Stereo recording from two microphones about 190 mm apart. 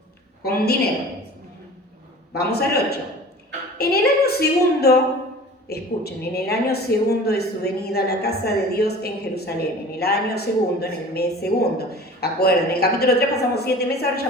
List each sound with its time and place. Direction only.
0.4 s a woman's voice: 55° left (ahead or behind)
2.3 s a woman's voice: 55° left (ahead or behind)